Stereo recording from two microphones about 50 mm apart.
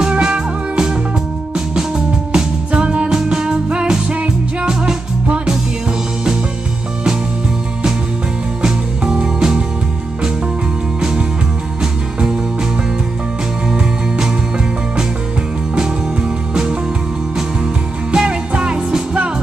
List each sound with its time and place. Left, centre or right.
0.2 s music: centre
2.3 s music: centre
8.6 s music: centre
11.8 s music: centre
13.7 s music: centre
15.7 s music: centre
18.1 s music: centre